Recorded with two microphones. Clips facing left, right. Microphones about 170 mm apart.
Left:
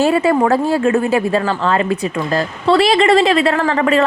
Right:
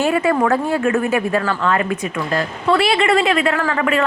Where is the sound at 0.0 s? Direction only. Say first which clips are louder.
Left 3 dB; 30° left (ahead or behind).